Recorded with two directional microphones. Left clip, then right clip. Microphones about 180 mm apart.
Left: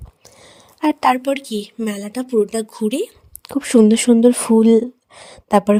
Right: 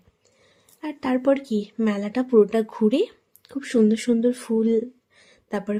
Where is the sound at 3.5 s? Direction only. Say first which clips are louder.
Left 8 dB; 45° left (ahead or behind).